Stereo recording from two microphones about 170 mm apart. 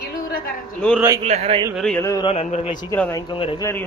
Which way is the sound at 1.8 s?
5° left (ahead or behind).